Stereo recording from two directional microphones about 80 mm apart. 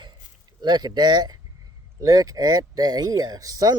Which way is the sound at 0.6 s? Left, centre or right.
Right.